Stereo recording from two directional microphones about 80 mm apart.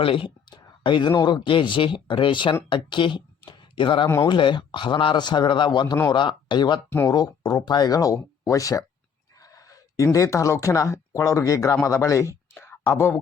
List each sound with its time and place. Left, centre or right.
0.1 s a sound: left
1.2 s a man's voice: left
7.1 s speech: left
12.5 s whispering: left
12.8 s speech: left